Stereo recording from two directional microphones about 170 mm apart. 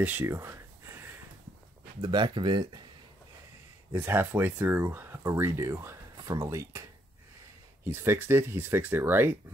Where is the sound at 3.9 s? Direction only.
15° right (ahead or behind).